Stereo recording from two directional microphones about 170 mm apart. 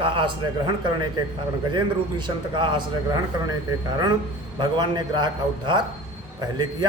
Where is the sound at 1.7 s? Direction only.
25° right (ahead or behind).